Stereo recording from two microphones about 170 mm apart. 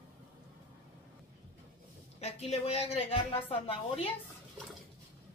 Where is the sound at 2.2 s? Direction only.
40° left (ahead or behind).